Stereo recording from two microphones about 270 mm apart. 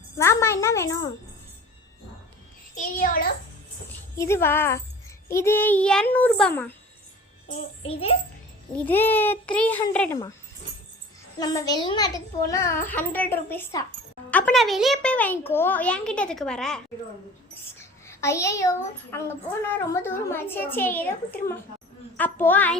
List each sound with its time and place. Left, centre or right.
0.2 s a sound: centre
2.7 s a child's voice: left
3.8 s a woman's voice: centre
7.4 s a child's voice: left
8.8 s a woman's voice: centre
11.3 s a woman's voice: centre
18.0 s a child's voice: centre